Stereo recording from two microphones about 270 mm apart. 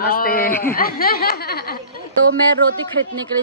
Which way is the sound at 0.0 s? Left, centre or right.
Left.